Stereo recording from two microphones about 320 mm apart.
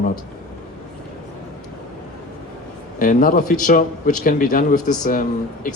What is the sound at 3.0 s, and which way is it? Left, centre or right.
A man's voice, left.